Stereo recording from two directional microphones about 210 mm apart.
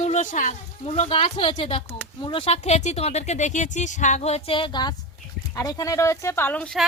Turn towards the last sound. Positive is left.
turn(degrees=5)  # may be behind; listen again after turning